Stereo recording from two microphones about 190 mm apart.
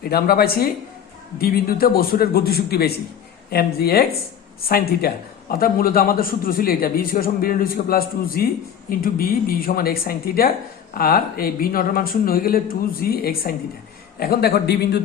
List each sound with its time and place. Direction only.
0.0 s a man's voice: 55° left (ahead or behind)